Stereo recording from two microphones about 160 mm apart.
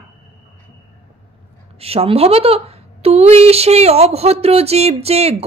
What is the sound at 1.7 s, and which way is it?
A woman's voice, 40° right (ahead or behind).